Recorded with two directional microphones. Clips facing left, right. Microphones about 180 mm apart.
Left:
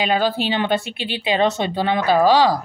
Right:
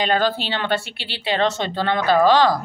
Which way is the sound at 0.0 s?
10° left (ahead or behind).